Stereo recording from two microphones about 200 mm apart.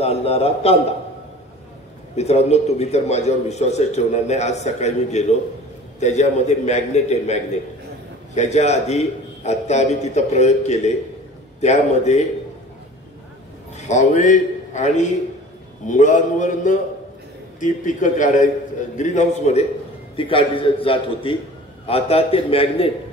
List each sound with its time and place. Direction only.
0.0 s a man's voice: 30° left (ahead or behind)
2.1 s a man's voice: 35° left (ahead or behind)
8.4 s a man's voice: 35° left (ahead or behind)
13.7 s a man's voice: 35° left (ahead or behind)